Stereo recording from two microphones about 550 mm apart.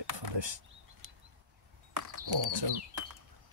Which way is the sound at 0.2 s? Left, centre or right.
Right.